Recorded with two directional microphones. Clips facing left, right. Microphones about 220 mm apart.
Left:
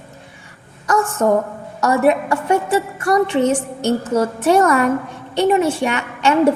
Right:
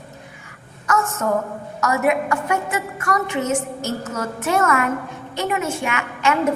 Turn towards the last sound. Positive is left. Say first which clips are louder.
# left 5 dB
turn(degrees=30)  # may be behind; listen again after turning